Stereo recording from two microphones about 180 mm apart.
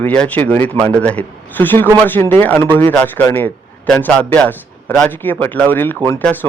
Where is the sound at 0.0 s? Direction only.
10° left (ahead or behind).